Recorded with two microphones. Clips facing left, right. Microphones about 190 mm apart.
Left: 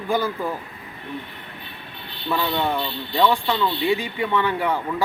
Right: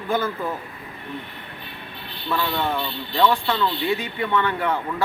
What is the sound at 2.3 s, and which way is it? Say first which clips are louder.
Speech: left 1 dB; 20° left (ahead or behind).